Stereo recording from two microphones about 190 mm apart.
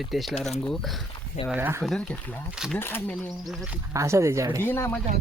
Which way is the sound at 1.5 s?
10° right (ahead or behind).